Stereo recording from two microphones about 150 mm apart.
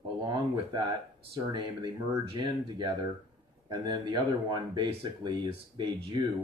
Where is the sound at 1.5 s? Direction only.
30° right (ahead or behind).